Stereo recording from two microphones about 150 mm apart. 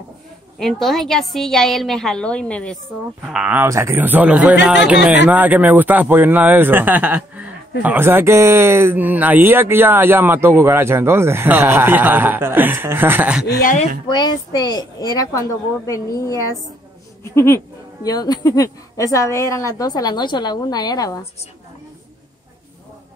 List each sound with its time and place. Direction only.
0.6 s a woman's voice: centre (ahead or behind)
3.3 s speech: 5° right (ahead or behind)
3.6 s speech: 20° right (ahead or behind)
14.0 s a woman's voice: 30° left (ahead or behind)